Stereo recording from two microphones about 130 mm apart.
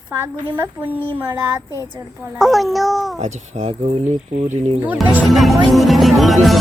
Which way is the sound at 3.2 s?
65° right (ahead or behind).